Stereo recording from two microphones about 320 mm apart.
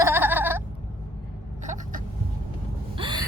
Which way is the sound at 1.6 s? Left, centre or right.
Right.